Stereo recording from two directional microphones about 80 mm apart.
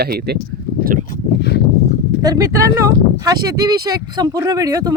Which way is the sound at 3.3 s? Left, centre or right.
Right.